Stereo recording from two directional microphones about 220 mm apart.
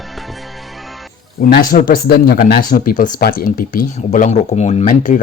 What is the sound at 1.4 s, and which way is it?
Speech, 45° left (ahead or behind).